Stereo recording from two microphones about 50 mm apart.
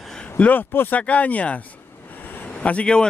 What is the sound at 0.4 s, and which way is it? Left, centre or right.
Speech, left.